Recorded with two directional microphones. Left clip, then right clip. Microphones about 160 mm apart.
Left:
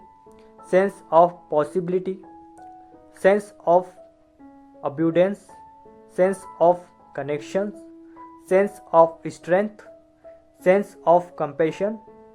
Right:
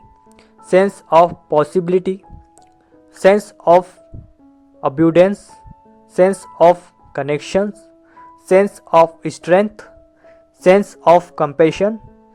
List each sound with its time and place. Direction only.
0.7 s speech: 25° right (ahead or behind)